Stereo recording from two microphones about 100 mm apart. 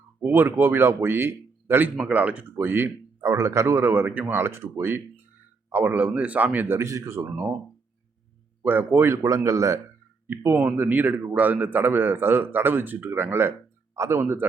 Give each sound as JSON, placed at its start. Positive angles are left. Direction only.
{"t": 0.2, "sound": "speech", "side_deg": -20}
{"t": 2.0, "sound": "speech", "side_deg": -10}
{"t": 8.6, "sound": "speech", "side_deg": -20}